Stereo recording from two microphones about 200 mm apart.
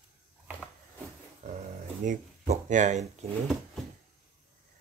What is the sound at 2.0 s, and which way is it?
Speech, 40° right (ahead or behind).